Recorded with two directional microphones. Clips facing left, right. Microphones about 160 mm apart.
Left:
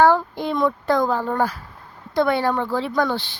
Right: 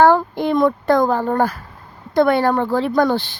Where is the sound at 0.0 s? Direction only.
55° right (ahead or behind).